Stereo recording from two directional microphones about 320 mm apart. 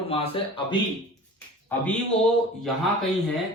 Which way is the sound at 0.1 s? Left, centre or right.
Centre.